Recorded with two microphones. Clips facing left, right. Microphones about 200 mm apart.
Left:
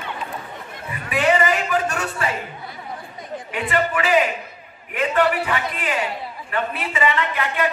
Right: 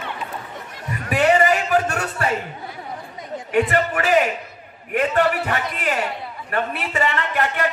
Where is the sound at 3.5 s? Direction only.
45° right (ahead or behind).